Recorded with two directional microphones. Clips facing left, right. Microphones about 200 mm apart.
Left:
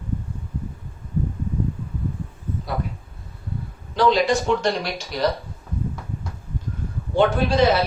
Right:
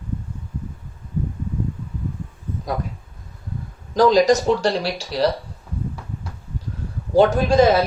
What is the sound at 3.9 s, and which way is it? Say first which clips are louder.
Speech: right 4 dB; 40° right (ahead or behind).